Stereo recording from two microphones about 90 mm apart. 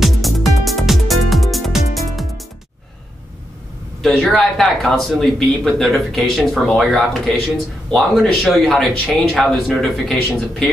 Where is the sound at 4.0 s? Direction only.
Centre (ahead or behind).